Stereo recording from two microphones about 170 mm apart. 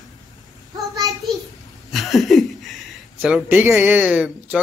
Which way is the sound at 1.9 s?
Centre (ahead or behind).